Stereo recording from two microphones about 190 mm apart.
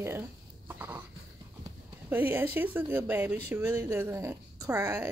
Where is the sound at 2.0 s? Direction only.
10° right (ahead or behind).